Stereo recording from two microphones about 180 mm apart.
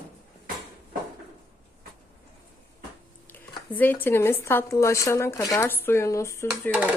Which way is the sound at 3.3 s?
10° left (ahead or behind).